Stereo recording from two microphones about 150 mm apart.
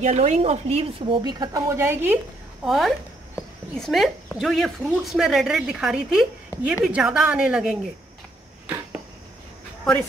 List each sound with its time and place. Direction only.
0.0 s a woman's voice: 50° right (ahead or behind); by 2.1 s 15° right (ahead or behind)
2.6 s speech: centre (ahead or behind)